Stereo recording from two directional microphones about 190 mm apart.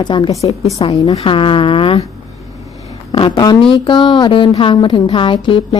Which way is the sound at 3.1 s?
25° left (ahead or behind).